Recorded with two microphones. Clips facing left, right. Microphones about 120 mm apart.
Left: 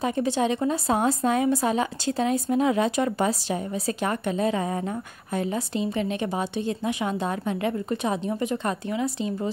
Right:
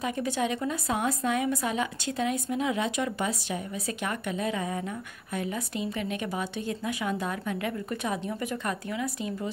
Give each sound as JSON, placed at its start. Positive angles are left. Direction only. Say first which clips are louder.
{"t": 0.0, "sound": "a woman's voice", "louder": "left 5 dB", "side_deg": 30}